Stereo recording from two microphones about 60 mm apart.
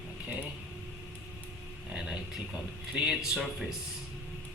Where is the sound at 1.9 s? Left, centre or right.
Centre.